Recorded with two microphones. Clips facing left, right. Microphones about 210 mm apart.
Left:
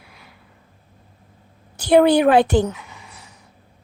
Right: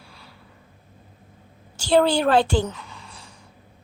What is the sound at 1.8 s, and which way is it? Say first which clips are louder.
Speech: left 5 dB; 20° left (ahead or behind).